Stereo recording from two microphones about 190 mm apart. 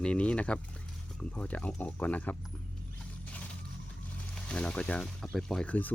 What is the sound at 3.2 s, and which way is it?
Mechanisms, 5° left (ahead or behind).